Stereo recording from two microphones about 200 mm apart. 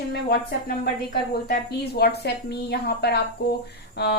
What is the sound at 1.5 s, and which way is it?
A woman's voice, 50° left (ahead or behind).